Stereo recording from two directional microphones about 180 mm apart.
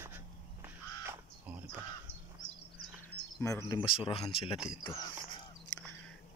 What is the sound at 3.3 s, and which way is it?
Speech, 15° left (ahead or behind).